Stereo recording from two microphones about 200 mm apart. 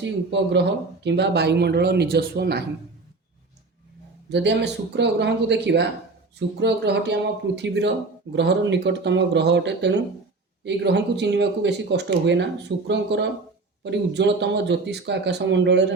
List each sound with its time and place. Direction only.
0.0 s speech: 60° right (ahead or behind)
4.3 s speech: 60° right (ahead or behind)